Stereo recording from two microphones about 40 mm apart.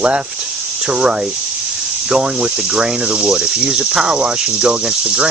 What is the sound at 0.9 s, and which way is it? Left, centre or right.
Speech, right.